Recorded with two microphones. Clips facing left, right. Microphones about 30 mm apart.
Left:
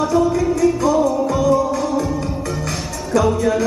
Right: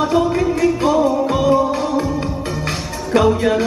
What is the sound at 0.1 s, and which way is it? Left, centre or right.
Speech, right.